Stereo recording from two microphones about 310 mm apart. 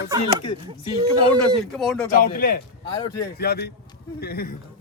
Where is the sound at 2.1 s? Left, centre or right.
Left.